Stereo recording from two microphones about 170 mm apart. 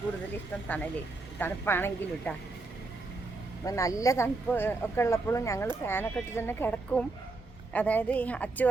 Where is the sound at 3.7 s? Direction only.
20° left (ahead or behind).